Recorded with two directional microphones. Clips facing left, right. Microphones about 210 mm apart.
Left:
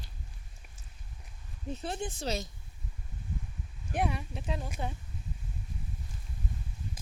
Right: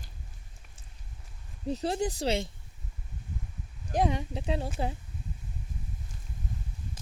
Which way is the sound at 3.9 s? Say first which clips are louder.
Right 5 dB; 35° right (ahead or behind).